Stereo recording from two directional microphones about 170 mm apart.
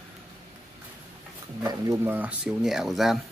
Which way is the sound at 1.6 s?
20° right (ahead or behind).